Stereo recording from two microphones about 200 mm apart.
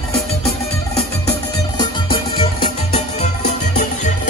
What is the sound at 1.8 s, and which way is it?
Music, 25° left (ahead or behind).